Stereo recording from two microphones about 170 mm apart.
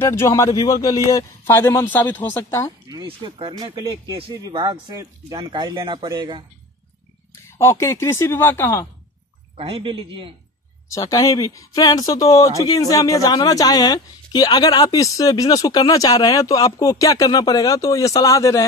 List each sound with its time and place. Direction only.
0.0 s speech: 15° left (ahead or behind)
2.9 s speech: 25° right (ahead or behind)
7.4 s speech: 15° left (ahead or behind)
9.6 s a woman's voice: 30° right (ahead or behind)
10.9 s speech: 20° left (ahead or behind)